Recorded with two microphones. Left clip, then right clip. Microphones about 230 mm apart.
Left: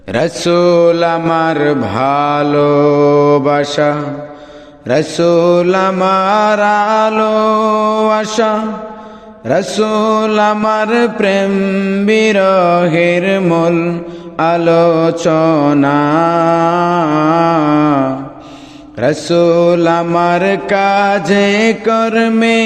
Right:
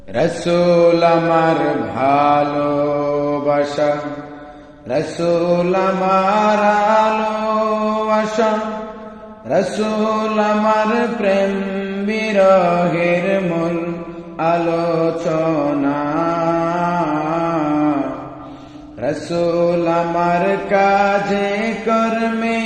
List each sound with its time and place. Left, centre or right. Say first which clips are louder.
0.1 s mantra: left 4 dB; left
4.9 s mantra: left 6 dB; left
17.4 s a sound: left 7 dB; left
18.9 s mantra: left 8 dB; left